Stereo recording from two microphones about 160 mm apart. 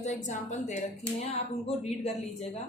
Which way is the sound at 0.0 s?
50° left (ahead or behind).